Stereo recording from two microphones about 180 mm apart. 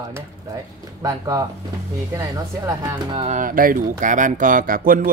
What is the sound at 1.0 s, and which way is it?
Speech, 20° right (ahead or behind).